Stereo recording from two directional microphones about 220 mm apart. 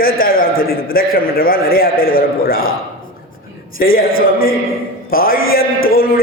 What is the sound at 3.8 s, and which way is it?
A man's voice, 40° left (ahead or behind).